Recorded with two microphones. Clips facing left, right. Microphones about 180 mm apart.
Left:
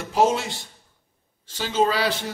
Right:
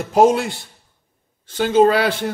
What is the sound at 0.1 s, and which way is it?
A man's voice, 55° right (ahead or behind).